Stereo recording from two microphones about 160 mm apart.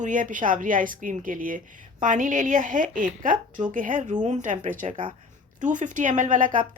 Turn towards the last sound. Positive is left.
turn(degrees=-55)  # may be behind; listen again after turning